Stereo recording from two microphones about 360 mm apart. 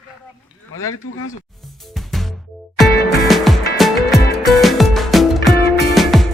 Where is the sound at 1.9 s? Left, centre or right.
Centre.